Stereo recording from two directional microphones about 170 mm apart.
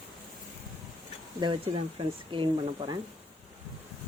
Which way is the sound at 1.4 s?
30° right (ahead or behind).